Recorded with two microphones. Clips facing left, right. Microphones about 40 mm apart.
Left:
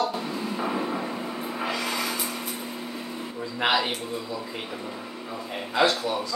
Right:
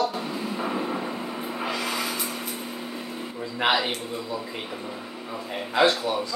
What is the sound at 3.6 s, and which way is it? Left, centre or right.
Speech, centre.